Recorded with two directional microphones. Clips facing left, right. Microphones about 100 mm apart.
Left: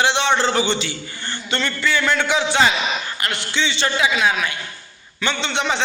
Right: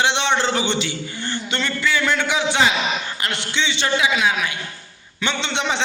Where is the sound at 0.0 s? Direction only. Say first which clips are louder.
Left 1 dB; 20° right (ahead or behind).